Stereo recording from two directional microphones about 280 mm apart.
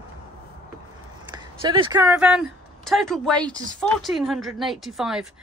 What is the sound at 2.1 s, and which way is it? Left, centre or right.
Speech, centre.